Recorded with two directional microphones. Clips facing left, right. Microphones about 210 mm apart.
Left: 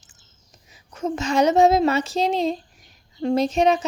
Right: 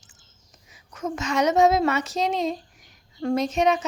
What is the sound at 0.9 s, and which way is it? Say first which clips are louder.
A woman's voice: left 4 dB; 30° left (ahead or behind).